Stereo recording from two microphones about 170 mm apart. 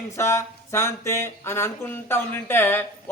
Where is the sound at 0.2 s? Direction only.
15° left (ahead or behind).